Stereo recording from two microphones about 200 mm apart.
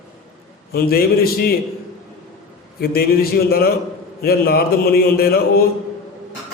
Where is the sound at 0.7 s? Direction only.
50° left (ahead or behind).